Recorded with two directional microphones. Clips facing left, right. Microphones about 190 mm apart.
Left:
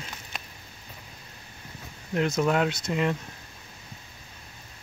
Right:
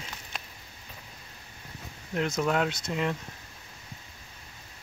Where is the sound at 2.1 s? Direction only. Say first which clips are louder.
Left 3 dB; centre (ahead or behind).